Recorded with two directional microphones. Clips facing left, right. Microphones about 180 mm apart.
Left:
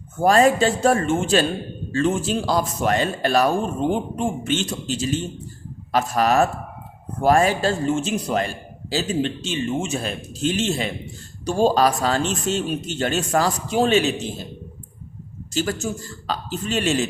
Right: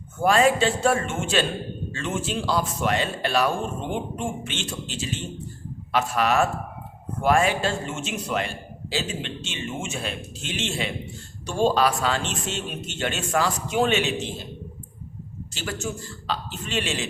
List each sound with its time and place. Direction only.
0.2 s a man's voice: 40° left (ahead or behind)
15.5 s a man's voice: 40° left (ahead or behind)